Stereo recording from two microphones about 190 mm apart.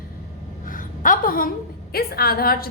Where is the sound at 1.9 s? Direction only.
55° left (ahead or behind).